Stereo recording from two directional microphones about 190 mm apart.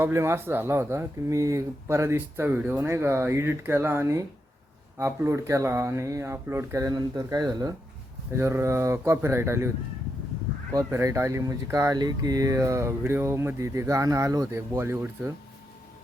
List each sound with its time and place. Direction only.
0.0 s speech: 15° right (ahead or behind)
10.8 s speech: 15° right (ahead or behind)